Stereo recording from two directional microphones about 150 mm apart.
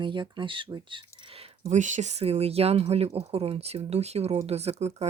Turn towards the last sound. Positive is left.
turn(degrees=-45)  # may be behind; listen again after turning